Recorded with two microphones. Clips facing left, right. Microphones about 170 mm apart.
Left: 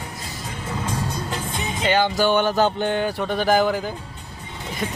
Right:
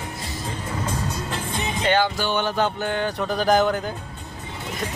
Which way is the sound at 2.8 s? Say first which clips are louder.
Left 3 dB; 15° left (ahead or behind).